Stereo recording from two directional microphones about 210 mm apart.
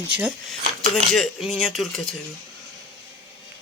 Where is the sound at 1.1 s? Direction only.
Centre (ahead or behind).